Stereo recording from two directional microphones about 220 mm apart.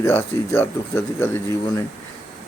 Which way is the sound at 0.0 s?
10° left (ahead or behind).